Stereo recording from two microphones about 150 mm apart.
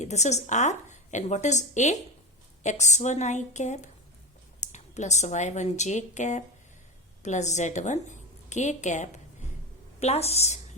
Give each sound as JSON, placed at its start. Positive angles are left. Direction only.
{"t": 0.0, "sound": "a woman's voice", "side_deg": 50}